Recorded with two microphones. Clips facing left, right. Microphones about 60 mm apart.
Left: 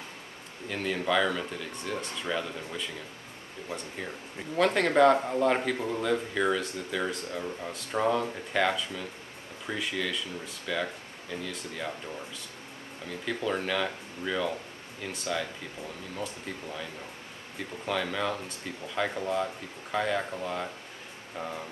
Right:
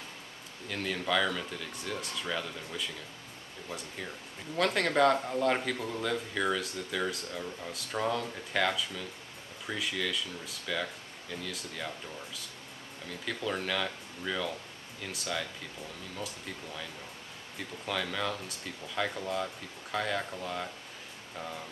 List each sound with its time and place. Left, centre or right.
0.7 s speech: centre
1.7 s speech: centre
4.6 s speech: centre
7.3 s speech: centre
13.2 s speech: centre
16.6 s speech: centre